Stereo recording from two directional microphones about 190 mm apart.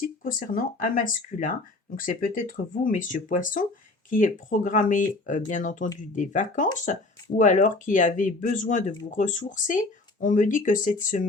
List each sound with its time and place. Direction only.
0.0 s speech: 45° left (ahead or behind)